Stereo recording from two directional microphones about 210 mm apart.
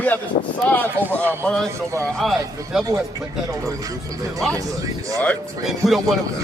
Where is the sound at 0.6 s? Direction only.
5° left (ahead or behind).